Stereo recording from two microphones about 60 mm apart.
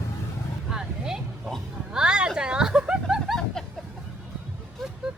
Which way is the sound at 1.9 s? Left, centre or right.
Centre.